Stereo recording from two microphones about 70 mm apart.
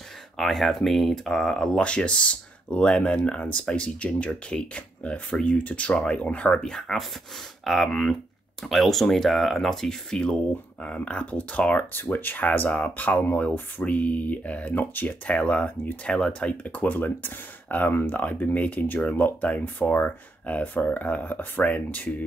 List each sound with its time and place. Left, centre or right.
0.4 s speech: centre; by 22.1 s left